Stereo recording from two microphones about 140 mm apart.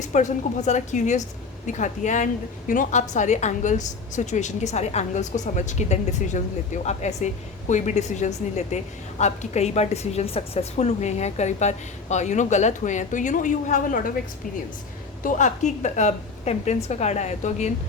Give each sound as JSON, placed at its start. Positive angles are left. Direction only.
{"t": 0.0, "sound": "a woman's voice", "side_deg": 60}
{"t": 15.2, "sound": "a woman's voice", "side_deg": 65}